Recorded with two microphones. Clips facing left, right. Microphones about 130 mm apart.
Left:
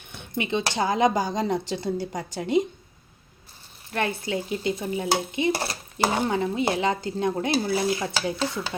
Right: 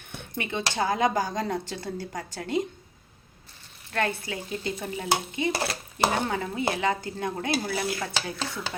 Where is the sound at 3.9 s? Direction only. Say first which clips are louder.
Left 2 dB; 15° left (ahead or behind).